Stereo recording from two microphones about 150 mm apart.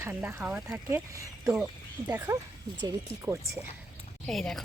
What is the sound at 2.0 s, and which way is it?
Speech, 15° right (ahead or behind).